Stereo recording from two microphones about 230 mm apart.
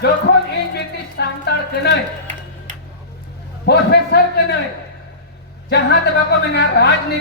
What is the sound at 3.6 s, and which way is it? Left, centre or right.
Speech, left.